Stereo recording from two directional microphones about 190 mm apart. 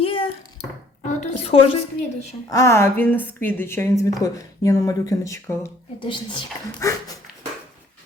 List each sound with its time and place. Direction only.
0.0 s a sound: 30° left (ahead or behind)
2.5 s a woman's voice: 15° left (ahead or behind)
6.7 s a woman's voice: 15° left (ahead or behind)